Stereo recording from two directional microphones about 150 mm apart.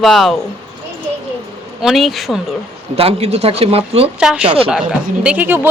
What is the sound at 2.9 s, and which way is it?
A man's voice, 40° right (ahead or behind).